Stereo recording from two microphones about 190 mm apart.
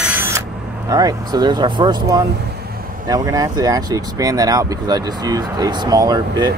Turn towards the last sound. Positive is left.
turn(degrees=-20)  # may be behind; listen again after turning